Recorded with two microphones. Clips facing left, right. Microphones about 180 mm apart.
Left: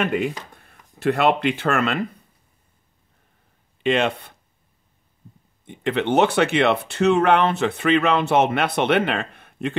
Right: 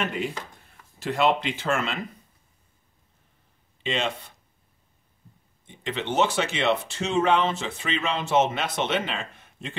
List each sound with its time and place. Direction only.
0.7 s speech: 60° left (ahead or behind)
3.8 s speech: 60° left (ahead or behind)
5.7 s speech: 60° left (ahead or behind)